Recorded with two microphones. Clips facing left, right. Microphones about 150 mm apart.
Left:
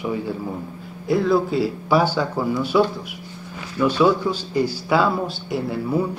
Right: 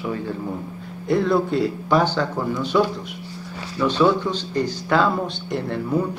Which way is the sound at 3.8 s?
10° left (ahead or behind).